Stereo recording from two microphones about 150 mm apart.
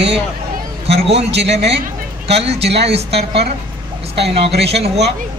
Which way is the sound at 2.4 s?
45° right (ahead or behind).